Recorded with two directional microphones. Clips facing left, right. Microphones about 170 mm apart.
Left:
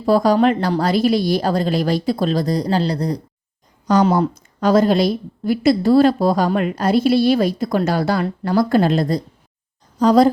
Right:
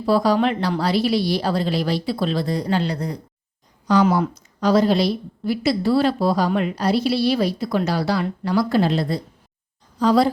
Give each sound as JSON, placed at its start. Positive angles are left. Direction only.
{"t": 0.0, "sound": "a woman's voice", "side_deg": 45}
{"t": 4.1, "sound": "a woman's voice", "side_deg": 45}